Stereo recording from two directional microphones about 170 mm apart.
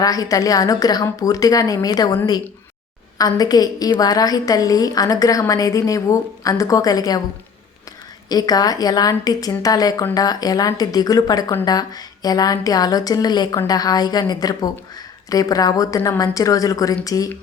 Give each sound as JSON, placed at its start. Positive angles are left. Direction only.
{"t": 0.0, "sound": "a woman's voice", "side_deg": 20}
{"t": 8.3, "sound": "a woman's voice", "side_deg": 20}